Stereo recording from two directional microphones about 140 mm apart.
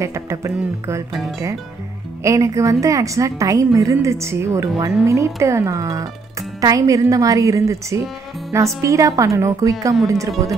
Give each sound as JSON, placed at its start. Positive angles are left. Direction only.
{"t": 0.0, "sound": "a woman's voice", "side_deg": -20}
{"t": 2.2, "sound": "a woman's voice", "side_deg": -25}